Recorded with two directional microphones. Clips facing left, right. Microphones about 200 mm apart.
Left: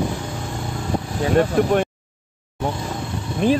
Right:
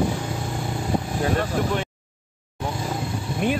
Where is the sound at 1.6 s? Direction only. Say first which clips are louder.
Left 6 dB; 55° left (ahead or behind).